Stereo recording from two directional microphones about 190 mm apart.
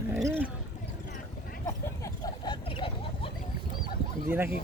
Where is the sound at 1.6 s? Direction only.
20° left (ahead or behind).